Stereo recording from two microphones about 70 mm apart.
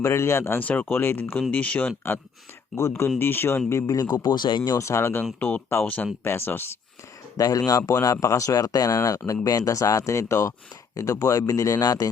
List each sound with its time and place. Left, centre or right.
0.0 s speech: left
0.6 s speech: left
2.7 s speech: left
3.9 s speech: left
4.8 s speech: left
5.4 s speech: left
7.3 s speech: left
8.0 s speech: left